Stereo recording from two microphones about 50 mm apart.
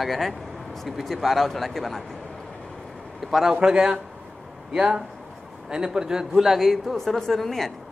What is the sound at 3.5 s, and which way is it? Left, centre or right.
A man's voice, centre.